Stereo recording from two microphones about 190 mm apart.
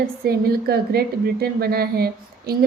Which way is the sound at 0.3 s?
55° right (ahead or behind).